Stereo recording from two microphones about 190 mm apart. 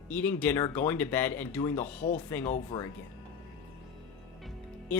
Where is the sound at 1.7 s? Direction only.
40° left (ahead or behind).